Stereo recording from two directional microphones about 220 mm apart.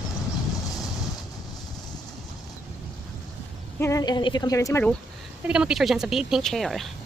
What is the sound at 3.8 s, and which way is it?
A woman's voice, 15° left (ahead or behind).